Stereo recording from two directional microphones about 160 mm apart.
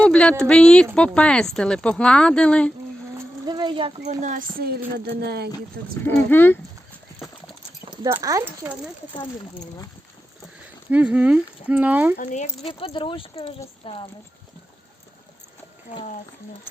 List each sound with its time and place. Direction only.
0.0 s speech: 5° left (ahead or behind)
3.2 s a sound: 25° right (ahead or behind)
4.0 s a woman's voice: 50° right (ahead or behind); by 4.8 s 65° right (ahead or behind)
5.0 s speech: 85° right
6.1 s speech: 15° left (ahead or behind)
8.0 s speech: 20° right (ahead or behind)
10.9 s speech: 5° right (ahead or behind)
12.1 s speech: 50° left (ahead or behind)
12.6 s speech: 35° left (ahead or behind)